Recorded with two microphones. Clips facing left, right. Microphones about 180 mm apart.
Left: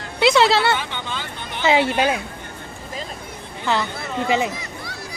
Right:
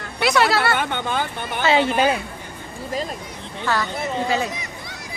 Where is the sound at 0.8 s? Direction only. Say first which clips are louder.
Right 6 dB; 55° right (ahead or behind).